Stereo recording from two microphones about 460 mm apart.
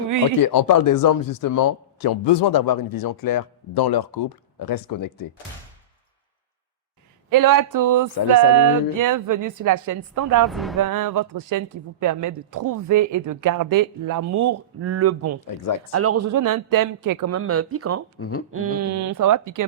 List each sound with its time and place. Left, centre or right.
0.3 s speech: left
7.3 s speech: right
10.4 s speech: centre
10.8 s speech: right
15.4 s speech: left
15.9 s speech: right
18.2 s speech: left
18.5 s speech: right